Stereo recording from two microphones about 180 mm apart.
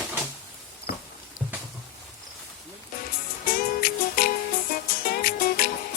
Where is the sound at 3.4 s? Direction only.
55° left (ahead or behind).